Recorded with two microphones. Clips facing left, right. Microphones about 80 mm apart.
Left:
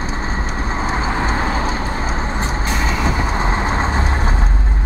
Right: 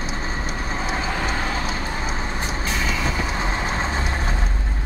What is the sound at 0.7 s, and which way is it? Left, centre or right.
Vehicle, left.